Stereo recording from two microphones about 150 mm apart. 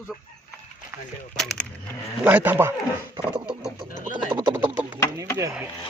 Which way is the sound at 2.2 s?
10° right (ahead or behind).